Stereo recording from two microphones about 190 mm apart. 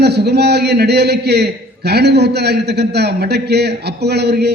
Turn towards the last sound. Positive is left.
turn(degrees=-60)  # may be behind; listen again after turning